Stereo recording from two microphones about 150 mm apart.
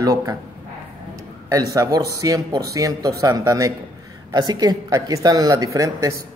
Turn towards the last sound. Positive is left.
turn(degrees=-20)  # may be behind; listen again after turning